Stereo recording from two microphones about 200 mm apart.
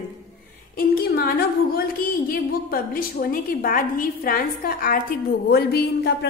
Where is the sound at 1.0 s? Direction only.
50° left (ahead or behind).